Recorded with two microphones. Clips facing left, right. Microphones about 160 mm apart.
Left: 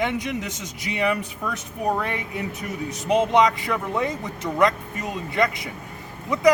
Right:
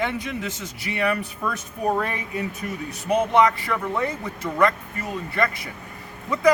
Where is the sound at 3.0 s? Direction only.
20° left (ahead or behind).